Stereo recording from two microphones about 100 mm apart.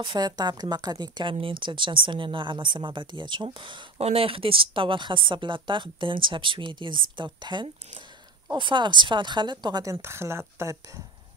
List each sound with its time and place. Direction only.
0.0 s speech: 45° right (ahead or behind)
1.3 s a woman's voice: 60° right (ahead or behind)
4.0 s a woman's voice: 80° right; by 9.8 s 45° right (ahead or behind)
9.8 s speech: 25° right (ahead or behind)